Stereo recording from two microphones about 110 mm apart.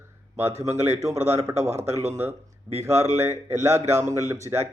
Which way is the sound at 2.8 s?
25° right (ahead or behind).